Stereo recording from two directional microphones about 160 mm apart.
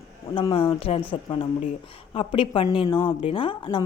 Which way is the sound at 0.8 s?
40° left (ahead or behind).